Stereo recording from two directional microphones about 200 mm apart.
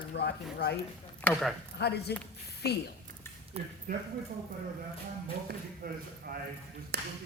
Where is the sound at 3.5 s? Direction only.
30° right (ahead or behind).